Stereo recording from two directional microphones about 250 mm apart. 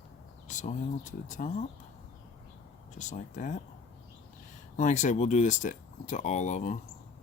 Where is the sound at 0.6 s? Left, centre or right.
Left.